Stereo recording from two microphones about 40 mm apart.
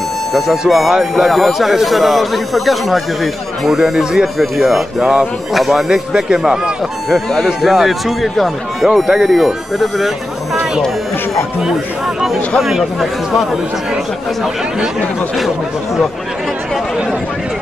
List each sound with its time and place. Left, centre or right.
0.3 s speech: centre
6.1 s speech: centre
7.6 s speech: centre
9.8 s speech: centre
12.6 s speech: centre